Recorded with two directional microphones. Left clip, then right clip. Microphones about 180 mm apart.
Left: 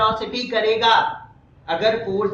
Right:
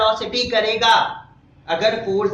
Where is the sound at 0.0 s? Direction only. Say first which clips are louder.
Right 2 dB; 15° right (ahead or behind).